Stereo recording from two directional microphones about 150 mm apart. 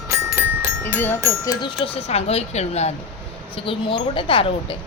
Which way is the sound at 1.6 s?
35° left (ahead or behind).